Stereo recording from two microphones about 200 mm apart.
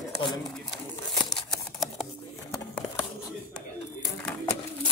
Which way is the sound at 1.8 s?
Centre (ahead or behind).